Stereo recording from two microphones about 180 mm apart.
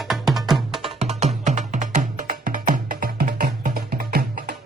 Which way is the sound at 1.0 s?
40° right (ahead or behind).